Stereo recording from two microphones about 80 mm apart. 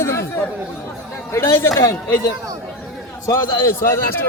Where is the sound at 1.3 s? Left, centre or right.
Left.